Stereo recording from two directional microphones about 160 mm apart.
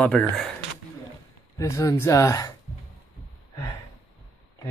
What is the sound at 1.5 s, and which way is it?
Speech, 20° left (ahead or behind).